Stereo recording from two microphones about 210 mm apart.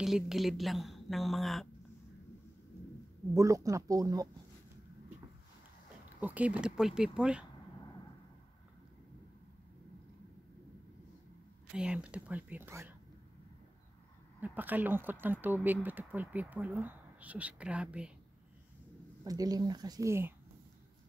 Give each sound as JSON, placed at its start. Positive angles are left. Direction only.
{"t": 0.0, "sound": "a woman's voice", "side_deg": 0}
{"t": 3.3, "sound": "speech", "side_deg": -15}
{"t": 6.2, "sound": "a woman's voice", "side_deg": -5}
{"t": 11.7, "sound": "speech", "side_deg": -5}
{"t": 14.4, "sound": "speech", "side_deg": -10}
{"t": 19.2, "sound": "speech", "side_deg": -15}